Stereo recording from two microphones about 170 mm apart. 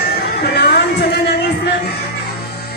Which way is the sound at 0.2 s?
75° left (ahead or behind).